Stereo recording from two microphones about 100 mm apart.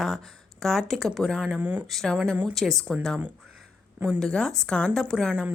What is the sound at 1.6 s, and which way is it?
Speech, 15° right (ahead or behind).